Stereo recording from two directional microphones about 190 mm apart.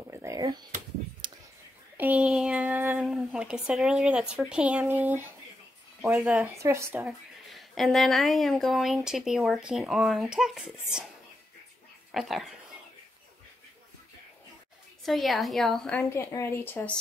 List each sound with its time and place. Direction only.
0.1 s a sound: 15° right (ahead or behind)
2.0 s speech: 5° right (ahead or behind)
7.0 s speech: centre (ahead or behind)
12.1 s speech: centre (ahead or behind)
15.0 s speech: centre (ahead or behind)
16.1 s speech: 15° left (ahead or behind)